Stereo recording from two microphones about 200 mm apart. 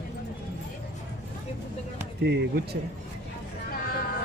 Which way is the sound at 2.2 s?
55° right (ahead or behind).